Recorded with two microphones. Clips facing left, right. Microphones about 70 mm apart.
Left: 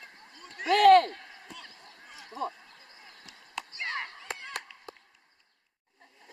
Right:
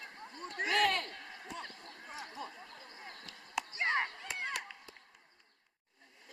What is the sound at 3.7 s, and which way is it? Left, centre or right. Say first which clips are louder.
Chop: right 3 dB; right.